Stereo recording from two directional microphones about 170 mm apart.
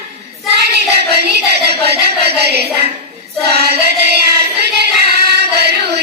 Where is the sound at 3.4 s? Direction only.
70° right (ahead or behind).